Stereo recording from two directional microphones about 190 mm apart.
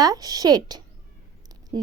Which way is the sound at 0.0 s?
20° right (ahead or behind).